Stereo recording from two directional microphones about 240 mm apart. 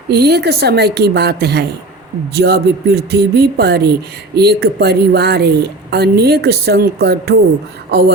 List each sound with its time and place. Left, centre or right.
0.1 s a woman's voice: right
7.9 s beatboxing: right